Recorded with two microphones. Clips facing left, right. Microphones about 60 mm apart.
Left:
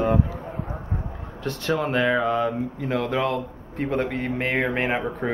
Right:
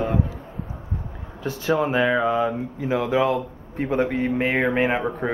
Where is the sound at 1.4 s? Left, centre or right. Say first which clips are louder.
Right 3 dB; centre.